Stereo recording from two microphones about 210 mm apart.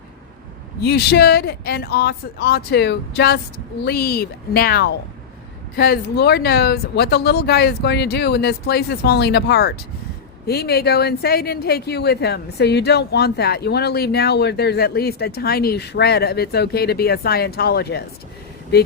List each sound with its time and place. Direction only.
0.8 s speech: 50° left (ahead or behind)